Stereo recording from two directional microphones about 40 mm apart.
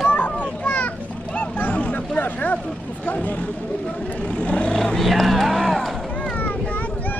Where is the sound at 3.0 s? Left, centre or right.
Left.